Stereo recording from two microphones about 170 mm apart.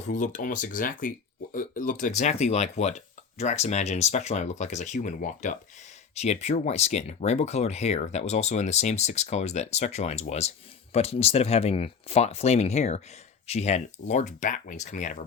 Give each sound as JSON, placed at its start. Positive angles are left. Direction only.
{"t": 0.1, "sound": "speech", "side_deg": 50}